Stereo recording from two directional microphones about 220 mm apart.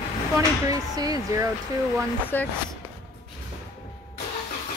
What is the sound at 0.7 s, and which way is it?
Speech, 15° right (ahead or behind).